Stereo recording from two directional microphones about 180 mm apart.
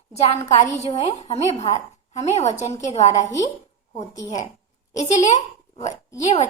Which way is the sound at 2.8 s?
35° left (ahead or behind).